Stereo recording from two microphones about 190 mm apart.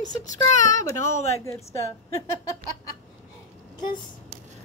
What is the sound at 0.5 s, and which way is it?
Speech, 40° left (ahead or behind).